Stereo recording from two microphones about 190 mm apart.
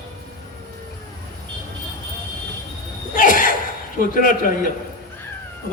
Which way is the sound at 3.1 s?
45° left (ahead or behind).